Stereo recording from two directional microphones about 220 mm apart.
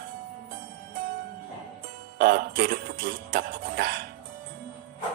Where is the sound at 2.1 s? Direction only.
45° right (ahead or behind).